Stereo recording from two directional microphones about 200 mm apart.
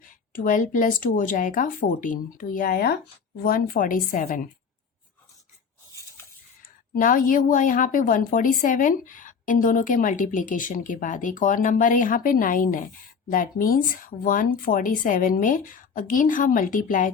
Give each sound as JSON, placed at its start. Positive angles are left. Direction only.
{"t": 0.0, "sound": "a woman's voice", "side_deg": 40}
{"t": 6.6, "sound": "a woman's voice", "side_deg": 45}